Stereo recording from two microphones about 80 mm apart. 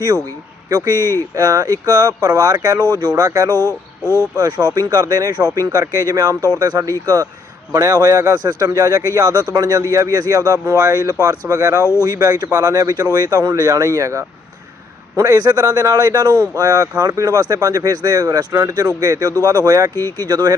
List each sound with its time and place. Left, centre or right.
0.7 s speech: right
0.9 s speech: left
1.4 s speech: right
3.5 s speech: left
4.4 s speech: right
5.5 s speech: right
8.0 s speech: right
8.4 s speech: right
19.9 s speech: left
20.2 s speech: right